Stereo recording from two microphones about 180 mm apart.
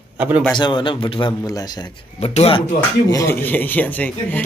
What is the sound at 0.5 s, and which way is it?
Speech, 25° left (ahead or behind).